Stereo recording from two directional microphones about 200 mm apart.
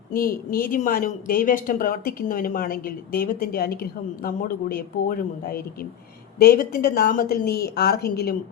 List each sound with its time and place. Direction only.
0.1 s a woman's voice: 45° left (ahead or behind)